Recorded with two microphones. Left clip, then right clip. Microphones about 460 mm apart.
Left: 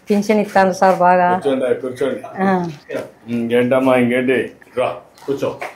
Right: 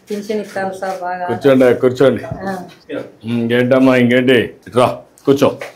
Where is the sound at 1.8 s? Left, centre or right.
Right.